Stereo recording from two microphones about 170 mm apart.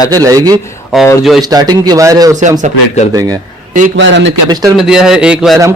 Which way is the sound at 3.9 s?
90° right.